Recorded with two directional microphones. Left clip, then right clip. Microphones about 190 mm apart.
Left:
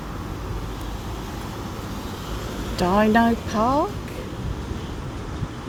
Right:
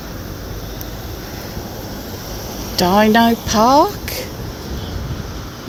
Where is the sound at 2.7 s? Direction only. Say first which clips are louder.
Right 6 dB; 10° right (ahead or behind).